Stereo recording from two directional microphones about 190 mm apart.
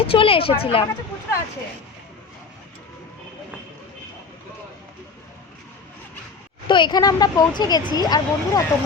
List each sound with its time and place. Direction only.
0.0 s speech: 30° left (ahead or behind)
6.7 s speech: 25° left (ahead or behind)